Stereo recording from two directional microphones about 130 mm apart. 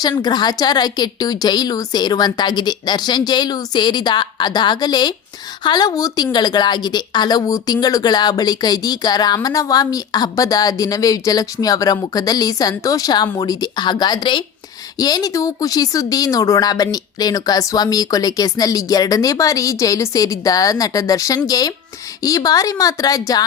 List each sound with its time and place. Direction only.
0.0 s speech: 30° left (ahead or behind)